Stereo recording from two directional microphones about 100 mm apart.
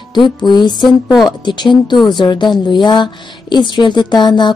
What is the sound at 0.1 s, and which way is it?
Speech, 50° left (ahead or behind).